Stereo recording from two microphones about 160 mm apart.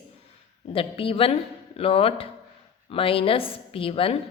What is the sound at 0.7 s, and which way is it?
Speech, 35° left (ahead or behind).